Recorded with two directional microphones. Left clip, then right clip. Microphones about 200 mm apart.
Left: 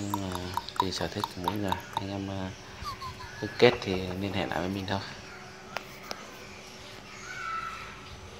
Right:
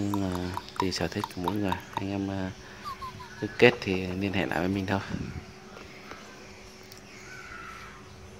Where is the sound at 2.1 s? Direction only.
30° right (ahead or behind).